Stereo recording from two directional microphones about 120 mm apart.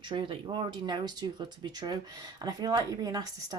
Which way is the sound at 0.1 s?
45° right (ahead or behind).